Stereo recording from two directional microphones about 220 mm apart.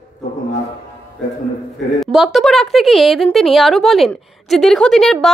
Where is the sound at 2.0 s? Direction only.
Centre (ahead or behind).